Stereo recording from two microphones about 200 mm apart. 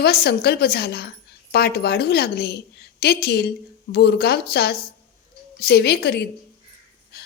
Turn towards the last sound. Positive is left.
turn(degrees=55)  # may be behind; listen again after turning